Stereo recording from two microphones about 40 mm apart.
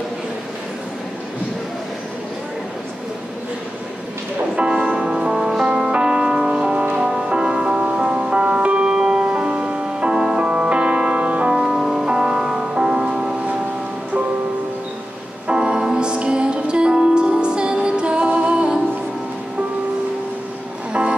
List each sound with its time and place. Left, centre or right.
4.6 s music: right
5.9 s music: right
8.8 s music: centre
11.5 s music: centre
12.1 s music: right
15.4 s music: right
20.9 s music: right